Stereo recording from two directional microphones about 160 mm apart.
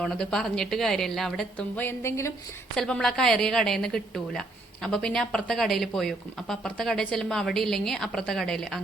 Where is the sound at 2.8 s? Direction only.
5° left (ahead or behind).